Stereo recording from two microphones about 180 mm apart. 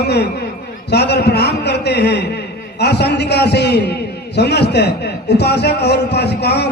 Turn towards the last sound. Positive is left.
turn(degrees=65)  # may be behind; listen again after turning